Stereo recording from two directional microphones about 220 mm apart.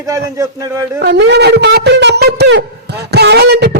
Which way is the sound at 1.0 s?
50° right (ahead or behind).